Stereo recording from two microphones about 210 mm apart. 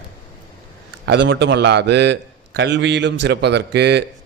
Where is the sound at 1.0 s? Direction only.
60° right (ahead or behind).